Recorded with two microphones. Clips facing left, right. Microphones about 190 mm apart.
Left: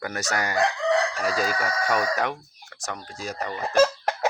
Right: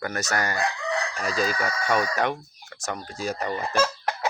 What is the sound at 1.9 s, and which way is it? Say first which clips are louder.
Speech: right 2 dB; 5° left (ahead or behind).